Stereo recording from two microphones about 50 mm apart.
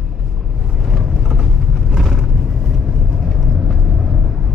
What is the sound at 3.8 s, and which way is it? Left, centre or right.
Vehicle, centre.